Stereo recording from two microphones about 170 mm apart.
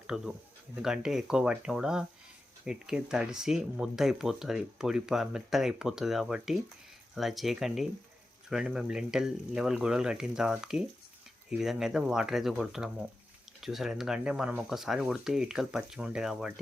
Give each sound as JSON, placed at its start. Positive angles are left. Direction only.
{"t": 0.1, "sound": "speech", "side_deg": 0}